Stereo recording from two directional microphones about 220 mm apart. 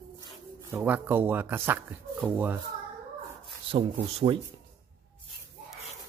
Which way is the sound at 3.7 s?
25° right (ahead or behind).